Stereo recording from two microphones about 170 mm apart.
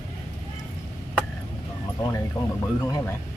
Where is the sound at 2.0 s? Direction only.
20° left (ahead or behind).